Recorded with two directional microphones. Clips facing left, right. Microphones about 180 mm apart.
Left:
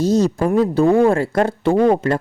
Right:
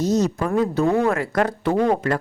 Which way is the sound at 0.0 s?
30° left (ahead or behind).